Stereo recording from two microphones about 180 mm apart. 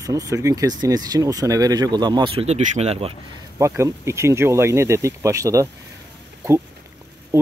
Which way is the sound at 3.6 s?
15° right (ahead or behind).